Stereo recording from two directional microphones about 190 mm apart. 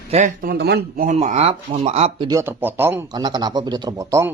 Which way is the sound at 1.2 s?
35° right (ahead or behind).